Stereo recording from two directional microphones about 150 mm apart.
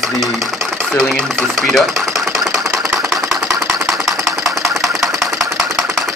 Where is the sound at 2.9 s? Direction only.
10° right (ahead or behind).